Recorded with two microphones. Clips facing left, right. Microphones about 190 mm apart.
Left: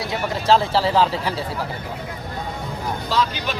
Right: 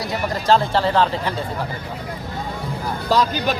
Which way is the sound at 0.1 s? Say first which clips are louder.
Even; centre (ahead or behind).